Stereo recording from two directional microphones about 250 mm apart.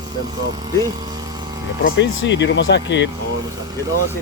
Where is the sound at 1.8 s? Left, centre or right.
Left.